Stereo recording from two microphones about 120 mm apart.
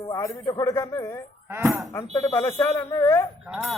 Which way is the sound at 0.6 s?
25° left (ahead or behind).